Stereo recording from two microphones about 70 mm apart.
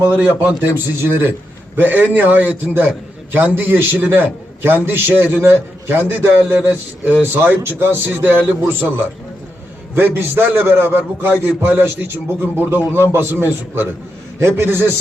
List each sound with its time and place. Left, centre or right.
0.2 s a man's voice: right
9.9 s a man's voice: right